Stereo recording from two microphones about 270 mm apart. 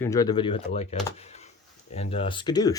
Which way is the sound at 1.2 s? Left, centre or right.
Left.